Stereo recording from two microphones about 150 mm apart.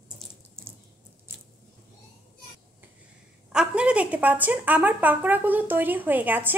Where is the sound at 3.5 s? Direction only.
5° right (ahead or behind).